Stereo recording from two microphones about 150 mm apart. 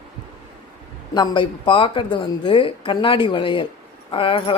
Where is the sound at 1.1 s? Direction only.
30° left (ahead or behind).